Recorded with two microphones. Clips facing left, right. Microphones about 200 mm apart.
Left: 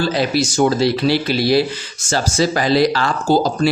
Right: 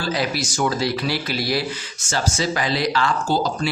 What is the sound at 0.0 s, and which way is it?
Speech, 25° left (ahead or behind).